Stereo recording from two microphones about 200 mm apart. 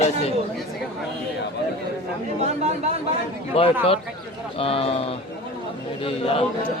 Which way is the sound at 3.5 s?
30° left (ahead or behind).